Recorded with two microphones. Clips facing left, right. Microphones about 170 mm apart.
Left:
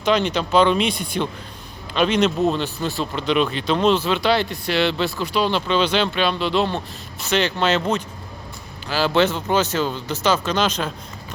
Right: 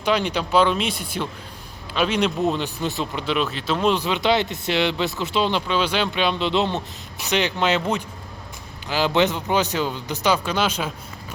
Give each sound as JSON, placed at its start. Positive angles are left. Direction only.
{"t": 0.0, "sound": "speech", "side_deg": -10}
{"t": 3.2, "sound": "speech", "side_deg": 0}